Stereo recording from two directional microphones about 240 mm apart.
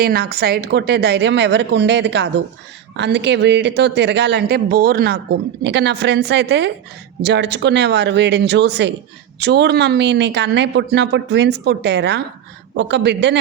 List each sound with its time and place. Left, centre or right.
0.0 s a woman's voice: right